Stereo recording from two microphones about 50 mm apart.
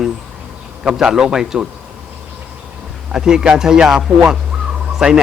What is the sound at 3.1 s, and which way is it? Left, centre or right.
Speech, centre.